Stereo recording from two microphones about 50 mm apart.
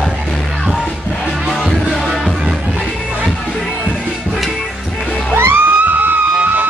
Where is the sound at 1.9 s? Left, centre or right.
Centre.